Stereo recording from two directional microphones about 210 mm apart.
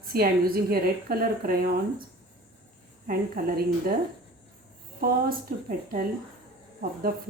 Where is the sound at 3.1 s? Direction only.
45° right (ahead or behind).